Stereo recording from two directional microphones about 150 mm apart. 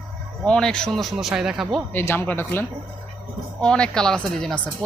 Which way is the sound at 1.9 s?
15° left (ahead or behind).